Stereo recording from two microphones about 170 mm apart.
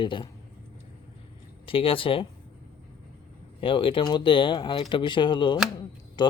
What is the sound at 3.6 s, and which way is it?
Speech, 30° left (ahead or behind).